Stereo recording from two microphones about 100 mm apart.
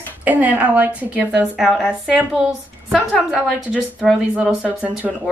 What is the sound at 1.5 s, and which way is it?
Speech, 5° right (ahead or behind).